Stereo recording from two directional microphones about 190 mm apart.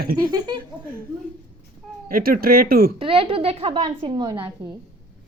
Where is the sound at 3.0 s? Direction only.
30° right (ahead or behind).